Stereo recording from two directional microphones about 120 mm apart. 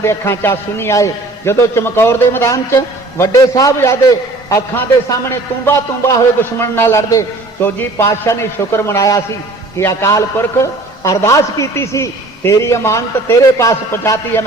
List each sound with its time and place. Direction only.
0.0 s a man's voice: 20° left (ahead or behind)